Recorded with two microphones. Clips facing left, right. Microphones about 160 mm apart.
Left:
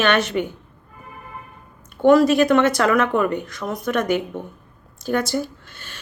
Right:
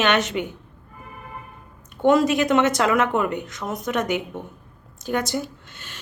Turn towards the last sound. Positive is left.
turn(degrees=-15)  # may be behind; listen again after turning